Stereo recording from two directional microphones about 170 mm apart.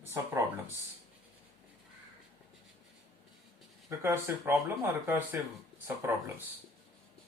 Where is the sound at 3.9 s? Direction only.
15° right (ahead or behind).